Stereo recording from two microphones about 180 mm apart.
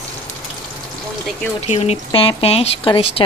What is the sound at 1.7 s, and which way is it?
Speech, 35° left (ahead or behind).